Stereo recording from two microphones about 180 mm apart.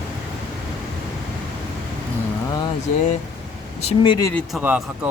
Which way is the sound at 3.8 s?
30° left (ahead or behind).